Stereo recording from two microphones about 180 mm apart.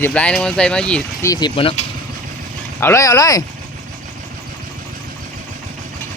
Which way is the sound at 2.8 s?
15° left (ahead or behind).